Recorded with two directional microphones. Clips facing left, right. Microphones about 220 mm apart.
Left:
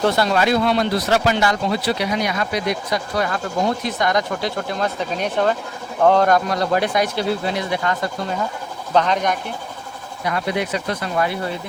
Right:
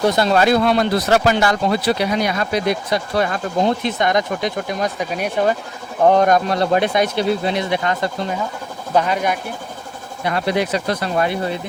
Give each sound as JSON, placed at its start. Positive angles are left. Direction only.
{"t": 0.0, "sound": "speech", "side_deg": -15}
{"t": 0.3, "sound": "speech", "side_deg": -40}
{"t": 2.0, "sound": "speech", "side_deg": -35}
{"t": 8.9, "sound": "speech", "side_deg": -10}
{"t": 10.2, "sound": "speech", "side_deg": -35}